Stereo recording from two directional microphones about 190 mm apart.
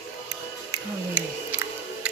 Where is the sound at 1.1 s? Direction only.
10° right (ahead or behind).